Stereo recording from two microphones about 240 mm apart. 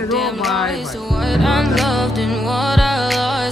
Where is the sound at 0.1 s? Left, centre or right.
Centre.